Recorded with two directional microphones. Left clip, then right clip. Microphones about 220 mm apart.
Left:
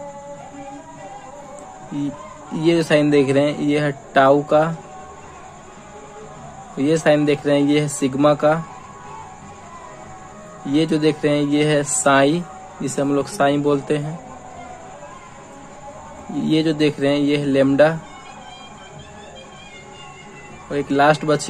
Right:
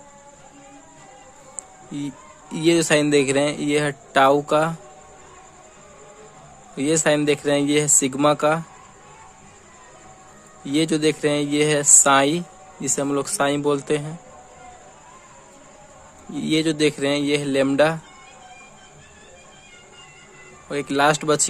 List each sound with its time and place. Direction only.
2.5 s speech: 40° right (ahead or behind)
6.7 s speech: 40° right (ahead or behind)
10.7 s speech: 40° right (ahead or behind)
16.3 s speech: 40° right (ahead or behind)
20.7 s speech: 40° right (ahead or behind)